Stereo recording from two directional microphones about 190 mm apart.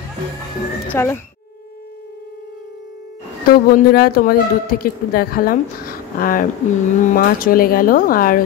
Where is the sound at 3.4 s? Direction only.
55° left (ahead or behind).